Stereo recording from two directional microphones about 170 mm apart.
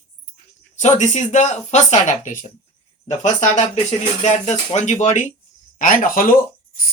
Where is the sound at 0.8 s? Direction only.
45° left (ahead or behind).